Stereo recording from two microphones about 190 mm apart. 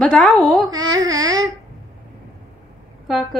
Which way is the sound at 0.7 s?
20° right (ahead or behind).